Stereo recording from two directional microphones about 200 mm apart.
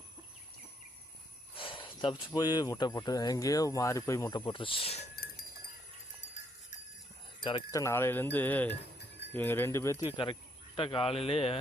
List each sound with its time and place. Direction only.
1.5 s speech: 25° left (ahead or behind)
7.4 s speech: 20° left (ahead or behind)
10.8 s speech: 25° left (ahead or behind)